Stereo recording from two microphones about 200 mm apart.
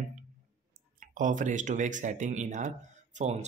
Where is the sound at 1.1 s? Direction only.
40° right (ahead or behind).